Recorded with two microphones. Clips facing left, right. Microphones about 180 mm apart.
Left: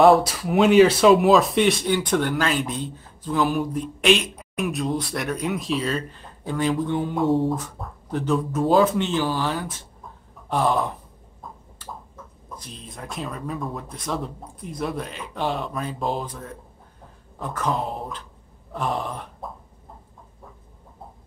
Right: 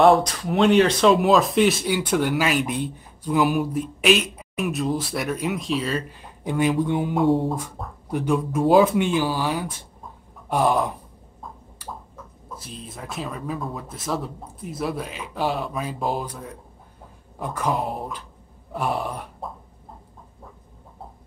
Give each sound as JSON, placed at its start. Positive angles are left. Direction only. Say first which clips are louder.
{"t": 0.0, "sound": "speech", "louder": "left 1 dB", "side_deg": 5}
{"t": 3.5, "sound": "speech", "louder": "right 1 dB", "side_deg": -5}
{"t": 6.1, "sound": "speech", "louder": "right 3 dB", "side_deg": -15}
{"t": 7.5, "sound": "a sound", "louder": "even", "side_deg": -10}
{"t": 8.5, "sound": "speech", "louder": "right 2 dB", "side_deg": 0}
{"t": 12.5, "sound": "speech", "louder": "right 1 dB", "side_deg": -5}